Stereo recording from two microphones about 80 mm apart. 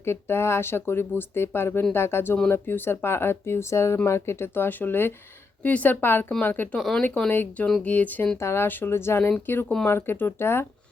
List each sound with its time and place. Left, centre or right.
0.0 s speech: left
6.7 s speech: centre
7.3 s speech: centre
8.4 s speech: left